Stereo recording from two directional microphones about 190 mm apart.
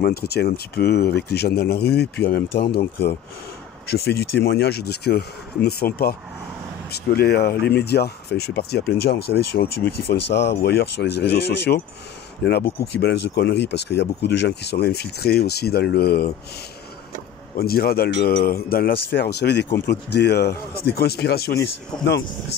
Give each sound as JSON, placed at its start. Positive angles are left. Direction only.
{"t": 0.0, "sound": "speech", "side_deg": 55}
{"t": 17.6, "sound": "speech", "side_deg": 55}